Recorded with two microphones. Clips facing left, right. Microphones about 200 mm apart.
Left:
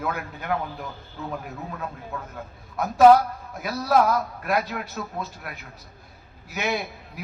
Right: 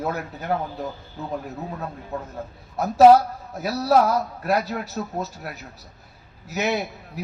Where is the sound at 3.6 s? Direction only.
35° right (ahead or behind).